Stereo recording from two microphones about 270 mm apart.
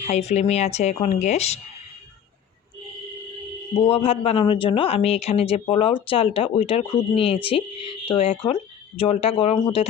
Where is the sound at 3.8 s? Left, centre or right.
Left.